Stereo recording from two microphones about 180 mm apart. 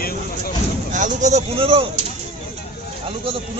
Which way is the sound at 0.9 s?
45° right (ahead or behind).